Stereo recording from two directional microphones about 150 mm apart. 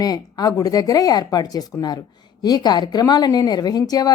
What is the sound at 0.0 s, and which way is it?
A woman's voice, 25° left (ahead or behind).